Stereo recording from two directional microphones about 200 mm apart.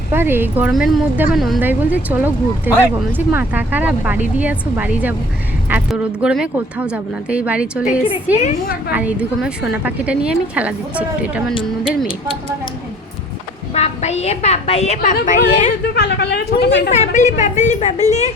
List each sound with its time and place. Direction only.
0.1 s a woman's voice: 10° right (ahead or behind)
7.9 s a woman's voice: 25° left (ahead or behind)
8.4 s a woman's voice: 35° left (ahead or behind)
8.7 s a woman's voice: 5° right (ahead or behind)
13.7 s a woman's voice: 35° left (ahead or behind)
16.0 s speech: 55° left (ahead or behind)
16.9 s a woman's voice: 35° left (ahead or behind)